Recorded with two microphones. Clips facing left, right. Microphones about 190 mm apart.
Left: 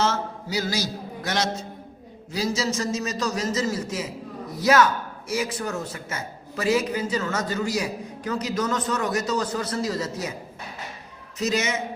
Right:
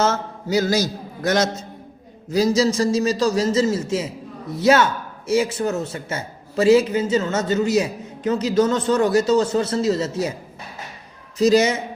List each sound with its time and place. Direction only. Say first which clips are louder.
0.0 s a man's voice: right 4 dB; 45° right (ahead or behind); by 10.3 s 30° right (ahead or behind)
11.3 s a man's voice: right 9 dB; 35° right (ahead or behind)